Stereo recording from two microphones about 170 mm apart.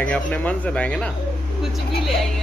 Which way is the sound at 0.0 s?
10° left (ahead or behind).